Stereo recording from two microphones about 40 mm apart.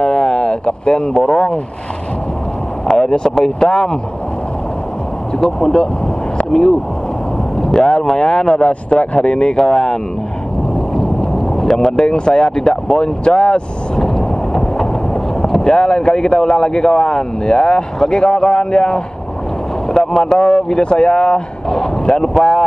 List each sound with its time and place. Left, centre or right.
0.0 s a sound: left
1.1 s speech: centre
2.9 s speech: centre
5.4 s speech: centre
7.6 s speech: centre
11.5 s speech: centre
12.9 s vehicle: left
15.4 s speech: centre